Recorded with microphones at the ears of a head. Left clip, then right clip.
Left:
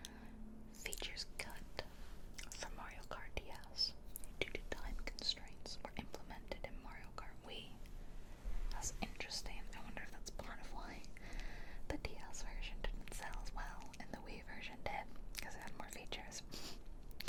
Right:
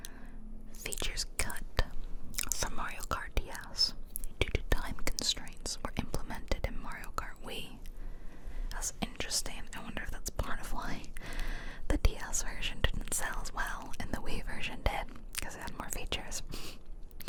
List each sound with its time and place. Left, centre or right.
0.8 s whispering: right
8.7 s whispering: right